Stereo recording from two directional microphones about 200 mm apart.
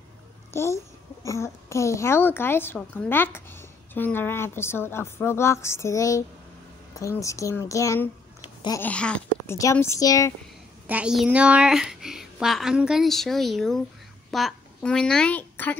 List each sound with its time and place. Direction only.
0.5 s a child's voice: 15° left (ahead or behind)
10.9 s a child's voice: 5° right (ahead or behind)